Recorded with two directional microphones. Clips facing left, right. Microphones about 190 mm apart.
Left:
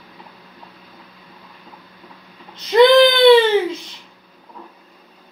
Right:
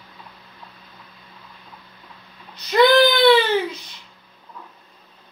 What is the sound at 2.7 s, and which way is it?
Baby cry, 20° left (ahead or behind).